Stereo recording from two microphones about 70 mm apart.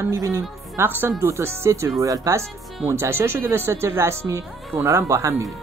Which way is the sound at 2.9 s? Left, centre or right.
Right.